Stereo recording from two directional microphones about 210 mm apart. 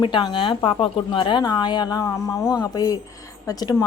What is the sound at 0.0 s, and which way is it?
Speech, 20° left (ahead or behind).